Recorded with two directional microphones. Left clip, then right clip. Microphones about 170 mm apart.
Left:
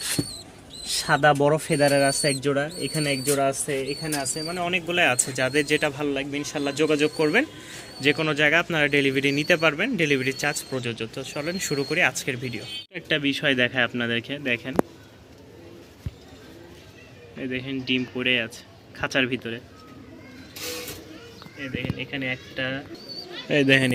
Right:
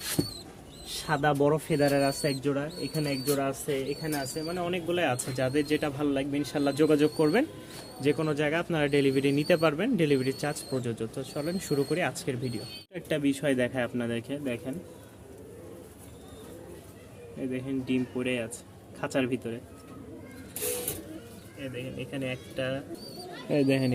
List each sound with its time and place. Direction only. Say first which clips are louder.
0.9 s speech: left 8 dB; 35° left (ahead or behind)
3.7 s speech: left 3 dB; 5° left (ahead or behind)
4.4 s speech: left 5 dB; 20° left (ahead or behind)
4.9 s speech: left 7 dB; centre (ahead or behind)
6.0 s speech: left 2 dB; 20° right (ahead or behind)
8.0 s speech: left 7 dB; centre (ahead or behind)
17.4 s speech: left 4 dB; 5° right (ahead or behind)
21.6 s speech: left 6 dB; centre (ahead or behind)